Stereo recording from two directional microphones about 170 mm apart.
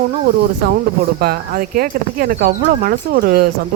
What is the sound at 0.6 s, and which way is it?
Speech, 65° right (ahead or behind).